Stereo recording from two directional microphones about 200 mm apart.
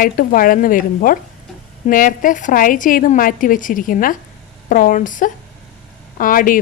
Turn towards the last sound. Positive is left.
turn(degrees=45)  # may be behind; listen again after turning